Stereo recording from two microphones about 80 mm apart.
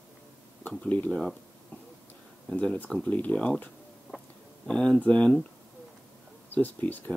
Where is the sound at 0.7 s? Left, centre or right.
Centre.